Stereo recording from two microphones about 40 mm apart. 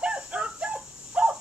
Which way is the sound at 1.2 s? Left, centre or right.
Right.